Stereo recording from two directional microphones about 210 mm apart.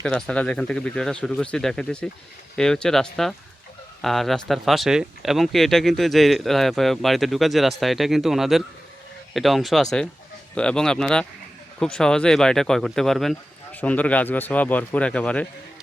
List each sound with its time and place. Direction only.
0.0 s speech: 5° left (ahead or behind)